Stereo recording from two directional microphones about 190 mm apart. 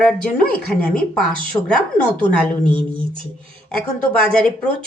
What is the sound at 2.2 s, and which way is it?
Speech, 25° right (ahead or behind).